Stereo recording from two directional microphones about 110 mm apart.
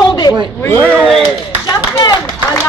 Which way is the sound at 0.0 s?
40° left (ahead or behind).